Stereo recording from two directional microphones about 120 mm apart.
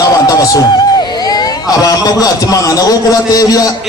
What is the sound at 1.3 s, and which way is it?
A man's voice, 30° left (ahead or behind).